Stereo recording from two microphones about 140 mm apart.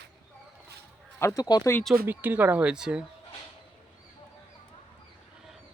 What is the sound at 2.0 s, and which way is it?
Speech, 15° right (ahead or behind).